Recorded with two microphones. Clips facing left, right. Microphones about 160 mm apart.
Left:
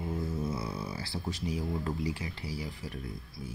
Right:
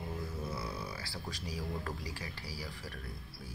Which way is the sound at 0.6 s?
25° left (ahead or behind).